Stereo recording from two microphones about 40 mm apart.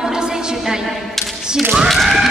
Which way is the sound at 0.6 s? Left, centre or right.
Centre.